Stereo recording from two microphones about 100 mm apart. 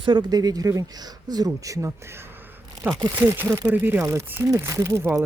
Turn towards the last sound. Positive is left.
turn(degrees=-25)  # may be behind; listen again after turning